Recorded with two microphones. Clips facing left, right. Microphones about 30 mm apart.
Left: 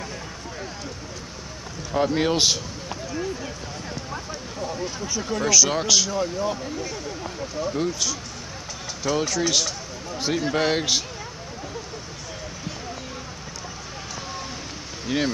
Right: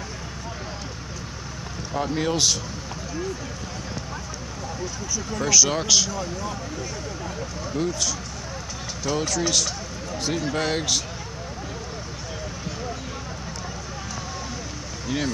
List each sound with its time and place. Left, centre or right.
2.0 s speech: left
5.0 s speech: left
5.4 s speech: centre
7.7 s speech: centre
15.1 s speech: left